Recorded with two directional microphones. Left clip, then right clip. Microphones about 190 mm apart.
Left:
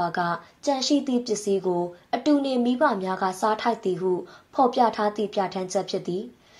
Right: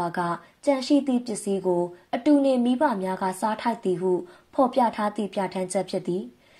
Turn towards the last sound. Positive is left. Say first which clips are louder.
# even
turn(degrees=-30)  # may be behind; listen again after turning